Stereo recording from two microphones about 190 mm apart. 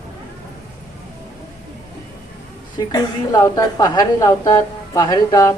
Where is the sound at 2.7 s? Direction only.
20° left (ahead or behind).